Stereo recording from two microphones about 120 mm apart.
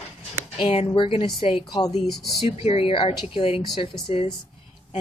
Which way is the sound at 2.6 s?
50° left (ahead or behind).